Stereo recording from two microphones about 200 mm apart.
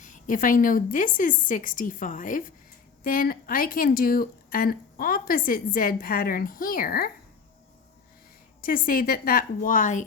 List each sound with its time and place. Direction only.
0.0 s a woman's voice: 40° left (ahead or behind)
8.6 s speech: 45° left (ahead or behind)